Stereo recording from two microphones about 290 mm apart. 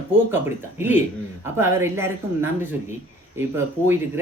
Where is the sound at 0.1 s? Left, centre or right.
Centre.